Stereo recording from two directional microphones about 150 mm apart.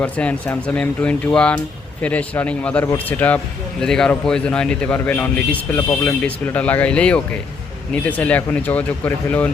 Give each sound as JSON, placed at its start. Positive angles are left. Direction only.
{"t": 0.0, "sound": "speech", "side_deg": 10}